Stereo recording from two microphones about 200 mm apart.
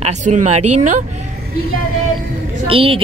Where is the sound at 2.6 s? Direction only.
25° right (ahead or behind).